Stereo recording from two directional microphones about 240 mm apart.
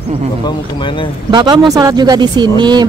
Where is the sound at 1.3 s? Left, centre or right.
Centre.